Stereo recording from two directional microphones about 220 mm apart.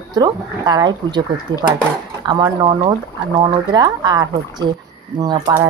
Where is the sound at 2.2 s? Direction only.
20° right (ahead or behind).